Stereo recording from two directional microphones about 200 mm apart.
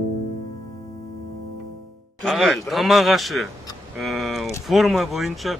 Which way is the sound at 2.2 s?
Centre (ahead or behind).